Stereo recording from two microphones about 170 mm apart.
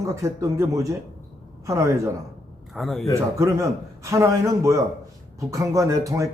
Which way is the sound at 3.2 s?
15° right (ahead or behind).